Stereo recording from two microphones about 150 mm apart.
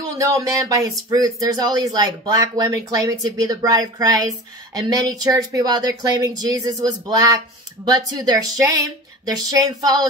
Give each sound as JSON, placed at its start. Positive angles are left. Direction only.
{"t": 0.0, "sound": "speech", "side_deg": -20}